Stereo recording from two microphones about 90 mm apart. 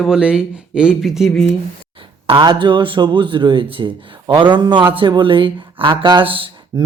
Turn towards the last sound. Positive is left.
turn(degrees=-70)  # may be behind; listen again after turning